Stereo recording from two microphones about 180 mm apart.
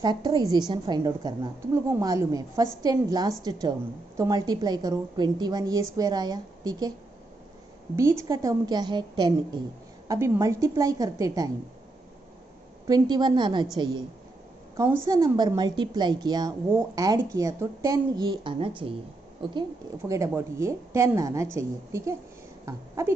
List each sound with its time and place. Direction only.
0.0 s a woman's voice: 25° right (ahead or behind)
7.9 s a woman's voice: 15° right (ahead or behind)
12.8 s a woman's voice: 20° right (ahead or behind)
20.1 s a woman's voice: 15° right (ahead or behind)